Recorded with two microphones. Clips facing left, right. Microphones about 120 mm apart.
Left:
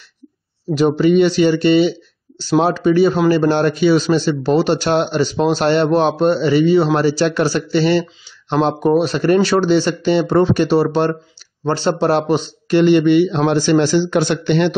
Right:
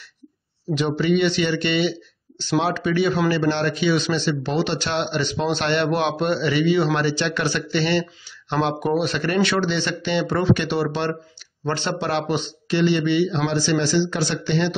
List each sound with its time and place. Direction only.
0.7 s a man's voice: 40° left (ahead or behind); by 14.7 s 55° left (ahead or behind)